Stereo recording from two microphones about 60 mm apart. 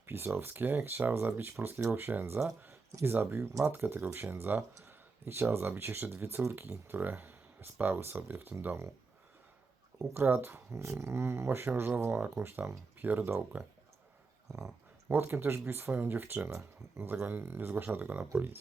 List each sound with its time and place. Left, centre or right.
0.0 s speech: right
10.2 s speech: right
14.5 s speech: right
15.1 s speech: right
17.7 s speech: right